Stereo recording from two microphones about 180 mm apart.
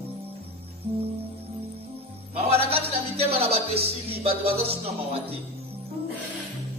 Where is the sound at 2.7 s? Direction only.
35° right (ahead or behind).